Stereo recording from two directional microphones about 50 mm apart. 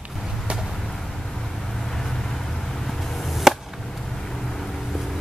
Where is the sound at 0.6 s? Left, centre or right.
Centre.